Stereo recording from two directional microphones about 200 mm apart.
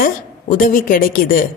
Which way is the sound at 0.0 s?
40° left (ahead or behind).